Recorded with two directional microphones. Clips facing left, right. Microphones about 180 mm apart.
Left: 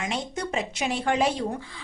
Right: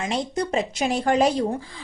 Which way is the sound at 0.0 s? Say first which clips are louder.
Right 5 dB; 35° right (ahead or behind).